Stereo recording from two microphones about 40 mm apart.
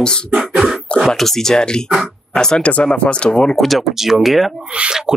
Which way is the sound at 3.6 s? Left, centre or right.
Centre.